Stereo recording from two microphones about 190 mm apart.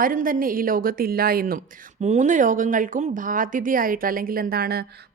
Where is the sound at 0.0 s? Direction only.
45° right (ahead or behind).